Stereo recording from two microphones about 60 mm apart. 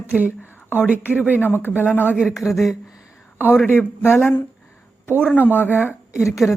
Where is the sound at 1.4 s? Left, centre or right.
Left.